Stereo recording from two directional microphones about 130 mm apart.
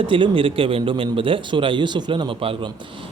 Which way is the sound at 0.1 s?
40° right (ahead or behind).